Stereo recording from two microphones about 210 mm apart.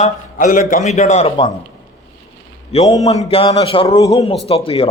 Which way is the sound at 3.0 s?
30° left (ahead or behind).